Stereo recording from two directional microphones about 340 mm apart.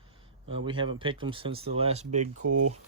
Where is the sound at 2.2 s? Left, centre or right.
Right.